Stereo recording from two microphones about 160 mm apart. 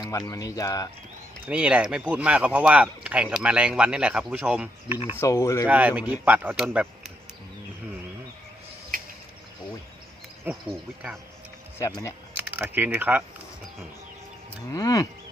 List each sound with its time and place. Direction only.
0.0 s speech: 25° left (ahead or behind)
1.5 s speech: 10° right (ahead or behind)
5.1 s speech: 20° left (ahead or behind)
5.6 s speech: 10° right (ahead or behind)
10.4 s speech: 5° right (ahead or behind)
11.8 s speech: 20° left (ahead or behind)
12.4 s speech: 10° right (ahead or behind)
14.7 s speech: 20° left (ahead or behind)